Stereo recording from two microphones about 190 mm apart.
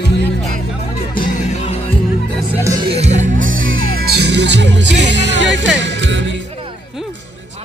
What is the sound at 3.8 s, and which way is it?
Music, 55° right (ahead or behind).